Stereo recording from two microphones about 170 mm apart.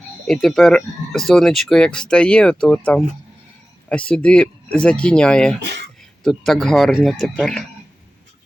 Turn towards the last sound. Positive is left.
turn(degrees=5)  # may be behind; listen again after turning